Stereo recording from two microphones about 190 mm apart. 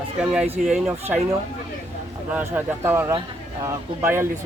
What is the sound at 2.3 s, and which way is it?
Speech, 10° right (ahead or behind).